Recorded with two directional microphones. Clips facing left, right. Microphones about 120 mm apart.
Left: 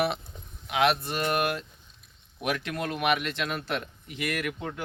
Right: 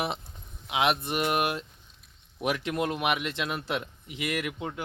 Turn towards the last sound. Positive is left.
turn(degrees=-20)  # may be behind; listen again after turning